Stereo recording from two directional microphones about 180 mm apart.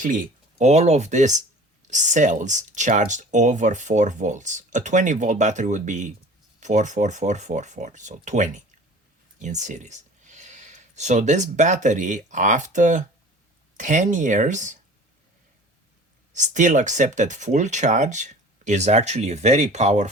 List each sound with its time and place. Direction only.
0.0 s speech: 45° right (ahead or behind)
16.3 s speech: 40° right (ahead or behind)